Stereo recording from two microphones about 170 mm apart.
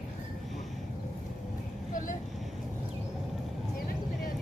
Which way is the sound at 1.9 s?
50° left (ahead or behind).